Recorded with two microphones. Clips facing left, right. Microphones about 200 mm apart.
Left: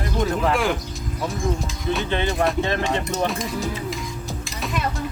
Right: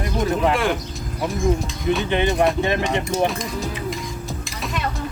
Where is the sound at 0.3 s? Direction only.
Centre (ahead or behind).